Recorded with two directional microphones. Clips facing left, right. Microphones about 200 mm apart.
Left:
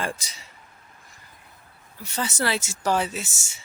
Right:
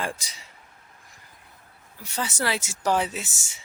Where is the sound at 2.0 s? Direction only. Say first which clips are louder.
Left 2 dB; 10° right (ahead or behind).